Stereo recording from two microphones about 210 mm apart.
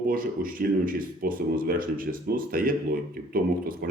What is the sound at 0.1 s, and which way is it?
Speech, 40° right (ahead or behind).